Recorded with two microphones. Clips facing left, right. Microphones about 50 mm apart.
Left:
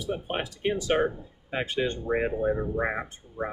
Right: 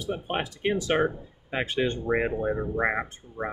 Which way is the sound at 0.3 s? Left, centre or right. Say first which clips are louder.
Right 3 dB; right.